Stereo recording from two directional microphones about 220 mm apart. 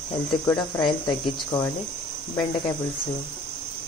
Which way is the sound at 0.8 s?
20° left (ahead or behind).